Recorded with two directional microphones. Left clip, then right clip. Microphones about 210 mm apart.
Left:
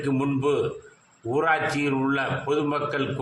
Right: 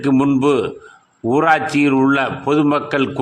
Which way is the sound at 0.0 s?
40° right (ahead or behind).